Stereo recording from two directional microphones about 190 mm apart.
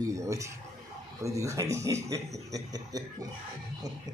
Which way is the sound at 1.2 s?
15° right (ahead or behind).